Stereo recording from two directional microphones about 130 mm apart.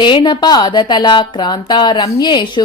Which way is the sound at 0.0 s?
35° left (ahead or behind).